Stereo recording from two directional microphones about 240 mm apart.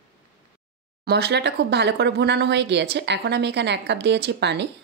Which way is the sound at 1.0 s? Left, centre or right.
Right.